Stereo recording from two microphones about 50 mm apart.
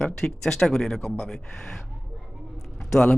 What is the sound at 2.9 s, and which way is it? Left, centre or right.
Speech, centre.